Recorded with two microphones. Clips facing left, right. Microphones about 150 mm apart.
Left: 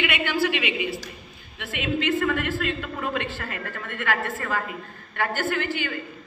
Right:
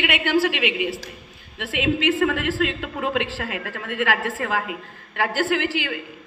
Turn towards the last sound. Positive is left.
turn(degrees=-90)